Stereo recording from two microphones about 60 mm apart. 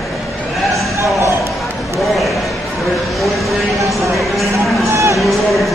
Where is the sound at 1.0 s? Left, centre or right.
Right.